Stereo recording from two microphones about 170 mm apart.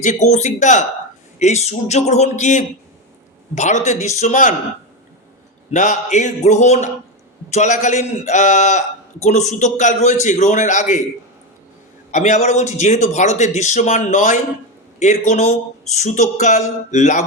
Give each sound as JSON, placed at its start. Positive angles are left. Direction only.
{"t": 0.0, "sound": "a man's voice", "side_deg": 45}
{"t": 5.7, "sound": "a man's voice", "side_deg": 45}
{"t": 12.1, "sound": "a man's voice", "side_deg": 45}